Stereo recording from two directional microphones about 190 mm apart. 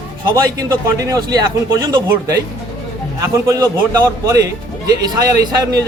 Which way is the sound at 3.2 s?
15° right (ahead or behind).